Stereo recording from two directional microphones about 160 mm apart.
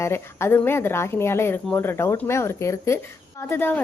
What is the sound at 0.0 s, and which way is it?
A woman's voice, 15° left (ahead or behind).